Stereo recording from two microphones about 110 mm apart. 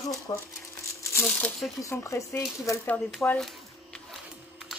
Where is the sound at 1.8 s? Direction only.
25° left (ahead or behind).